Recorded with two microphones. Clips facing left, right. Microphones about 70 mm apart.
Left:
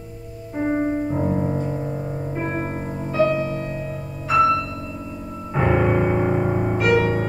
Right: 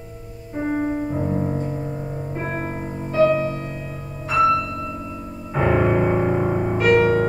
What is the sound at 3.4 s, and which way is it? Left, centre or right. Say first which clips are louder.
Music: even; right.